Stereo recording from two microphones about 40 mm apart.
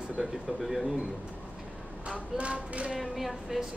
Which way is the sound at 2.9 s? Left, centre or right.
Centre.